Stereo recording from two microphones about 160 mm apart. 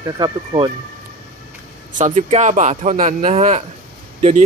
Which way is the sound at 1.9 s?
45° right (ahead or behind).